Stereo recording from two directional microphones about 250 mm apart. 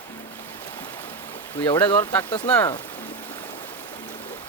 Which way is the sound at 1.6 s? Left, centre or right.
Centre.